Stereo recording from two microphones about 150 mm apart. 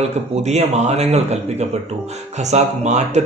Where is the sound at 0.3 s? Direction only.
45° right (ahead or behind).